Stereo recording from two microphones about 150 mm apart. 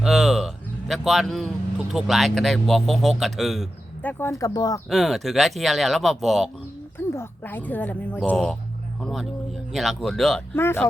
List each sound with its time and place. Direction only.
0.0 s a sound: centre (ahead or behind)
1.9 s speech: centre (ahead or behind)
4.0 s speech: 20° left (ahead or behind)
4.9 s speech: centre (ahead or behind)
7.1 s a woman's voice: 15° left (ahead or behind)
10.5 s a woman's voice: 15° left (ahead or behind)